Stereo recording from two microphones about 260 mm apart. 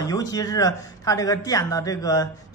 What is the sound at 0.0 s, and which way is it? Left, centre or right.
Speech, centre.